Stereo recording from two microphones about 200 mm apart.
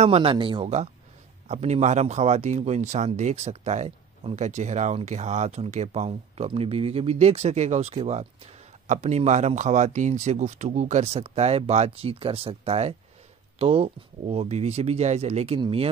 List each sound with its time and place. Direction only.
0.0 s speech: 30° right (ahead or behind)